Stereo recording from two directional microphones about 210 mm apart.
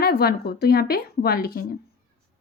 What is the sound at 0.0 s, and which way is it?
A woman's voice, 45° left (ahead or behind).